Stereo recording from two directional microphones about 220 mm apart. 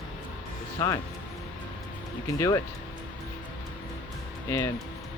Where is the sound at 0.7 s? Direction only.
15° left (ahead or behind).